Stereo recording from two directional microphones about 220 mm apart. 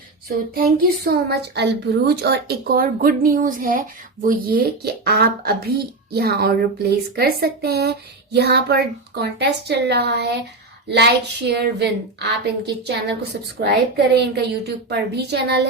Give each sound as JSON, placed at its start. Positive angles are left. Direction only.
{"t": 0.5, "sound": "speech", "side_deg": -45}